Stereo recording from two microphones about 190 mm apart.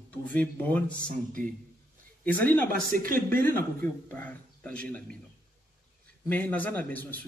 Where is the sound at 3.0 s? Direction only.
50° right (ahead or behind).